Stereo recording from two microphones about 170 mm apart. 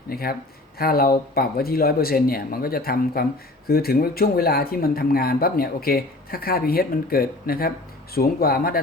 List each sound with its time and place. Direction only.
0.1 s speech: 60° left (ahead or behind)